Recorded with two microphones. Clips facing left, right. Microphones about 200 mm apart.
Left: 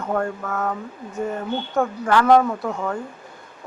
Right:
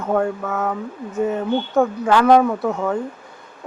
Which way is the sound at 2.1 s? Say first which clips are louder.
Right 1 dB; 15° right (ahead or behind).